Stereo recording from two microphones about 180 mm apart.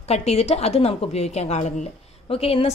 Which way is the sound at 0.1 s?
35° left (ahead or behind).